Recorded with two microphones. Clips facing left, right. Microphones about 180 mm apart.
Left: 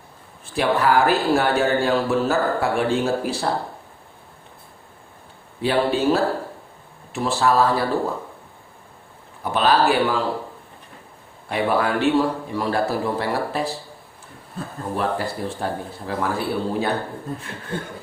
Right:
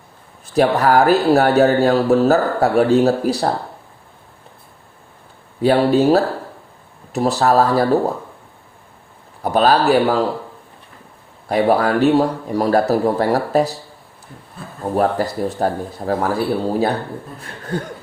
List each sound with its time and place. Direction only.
0.4 s speech: 40° right (ahead or behind)
5.6 s speech: 40° right (ahead or behind)
9.4 s speech: 40° right (ahead or behind)
11.4 s speech: 40° right (ahead or behind)
14.9 s speech: 40° right (ahead or behind)